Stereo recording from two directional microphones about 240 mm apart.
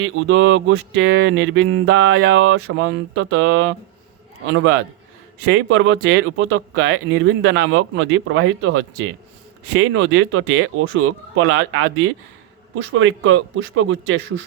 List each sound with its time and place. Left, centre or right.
0.0 s speech: right
5.5 s a man's voice: right